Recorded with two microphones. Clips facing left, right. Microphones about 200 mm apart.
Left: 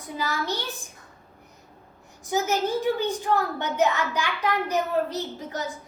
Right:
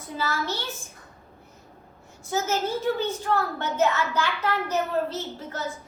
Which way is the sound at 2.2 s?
15° left (ahead or behind).